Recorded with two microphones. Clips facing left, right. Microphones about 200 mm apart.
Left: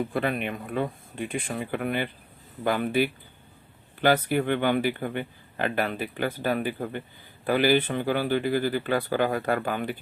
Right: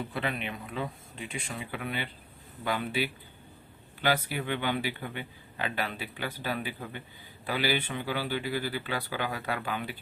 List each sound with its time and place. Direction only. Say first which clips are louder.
0.1 s speech: left 6 dB; 50° left (ahead or behind)